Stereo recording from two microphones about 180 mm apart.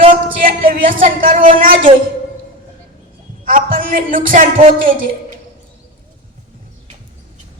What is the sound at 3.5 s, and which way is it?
Speech, 50° right (ahead or behind).